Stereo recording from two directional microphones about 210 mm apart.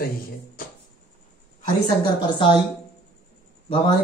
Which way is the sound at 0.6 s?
40° left (ahead or behind).